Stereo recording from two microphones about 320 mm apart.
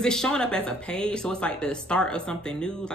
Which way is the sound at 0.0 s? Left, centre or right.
Centre.